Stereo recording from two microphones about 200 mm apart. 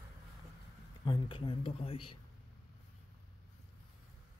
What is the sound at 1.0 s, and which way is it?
Speech, 25° left (ahead or behind).